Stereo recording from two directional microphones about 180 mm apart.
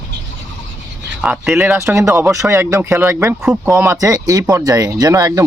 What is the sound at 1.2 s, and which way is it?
Speech, 5° right (ahead or behind).